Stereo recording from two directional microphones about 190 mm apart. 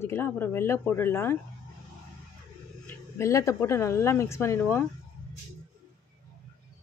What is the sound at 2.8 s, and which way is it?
Speech, 15° left (ahead or behind).